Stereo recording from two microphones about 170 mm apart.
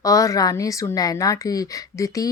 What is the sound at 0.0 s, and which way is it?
A woman's voice, 20° left (ahead or behind).